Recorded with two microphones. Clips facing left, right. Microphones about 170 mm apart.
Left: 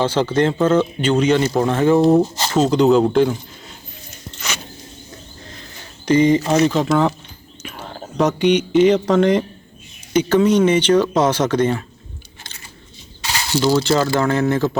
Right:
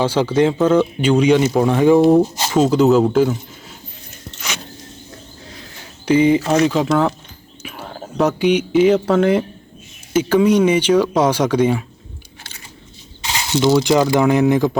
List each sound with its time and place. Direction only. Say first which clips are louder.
0.0 s speech: right 2 dB; 10° right (ahead or behind)
4.4 s power windows: even; 10° right (ahead or behind)
6.1 s speech: right 1 dB; 10° right (ahead or behind)
13.2 s speech: right 2 dB; 20° right (ahead or behind)